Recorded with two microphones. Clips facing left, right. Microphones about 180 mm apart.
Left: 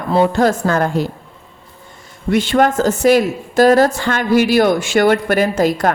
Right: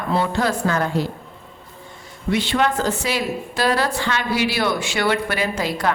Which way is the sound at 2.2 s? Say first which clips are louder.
Left 6 dB; 45° left (ahead or behind).